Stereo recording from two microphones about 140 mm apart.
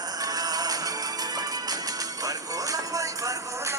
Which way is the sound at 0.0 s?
25° right (ahead or behind).